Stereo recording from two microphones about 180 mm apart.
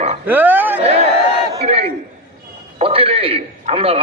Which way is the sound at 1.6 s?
35° right (ahead or behind).